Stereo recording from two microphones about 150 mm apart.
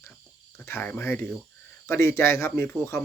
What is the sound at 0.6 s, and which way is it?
Speech, 15° left (ahead or behind).